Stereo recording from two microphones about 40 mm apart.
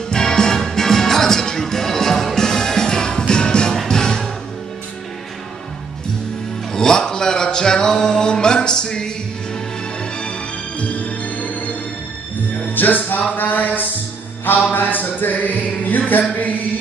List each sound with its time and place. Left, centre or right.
0.1 s music: centre
6.7 s music: centre
10.8 s music: left
12.7 s music: left
13.4 s a sound: left
14.4 s music: left
16.1 s a sound: left